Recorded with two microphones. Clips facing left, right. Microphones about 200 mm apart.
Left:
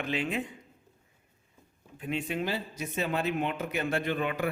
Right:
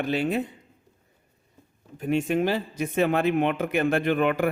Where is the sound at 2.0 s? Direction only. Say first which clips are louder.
Right 9 dB; 45° right (ahead or behind).